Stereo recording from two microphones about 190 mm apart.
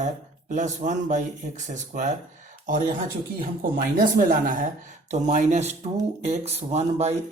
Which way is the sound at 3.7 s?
50° right (ahead or behind).